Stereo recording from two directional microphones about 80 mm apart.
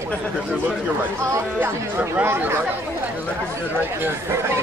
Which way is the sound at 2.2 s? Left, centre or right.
Right.